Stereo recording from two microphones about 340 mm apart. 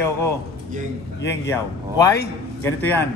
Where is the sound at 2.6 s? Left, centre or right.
Centre.